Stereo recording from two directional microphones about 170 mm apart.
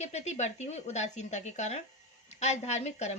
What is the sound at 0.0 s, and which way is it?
Speech, 40° left (ahead or behind).